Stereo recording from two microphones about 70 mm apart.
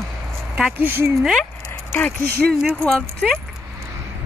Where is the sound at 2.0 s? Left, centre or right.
Left.